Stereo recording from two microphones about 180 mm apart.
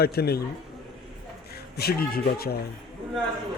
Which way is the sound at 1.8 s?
60° left (ahead or behind).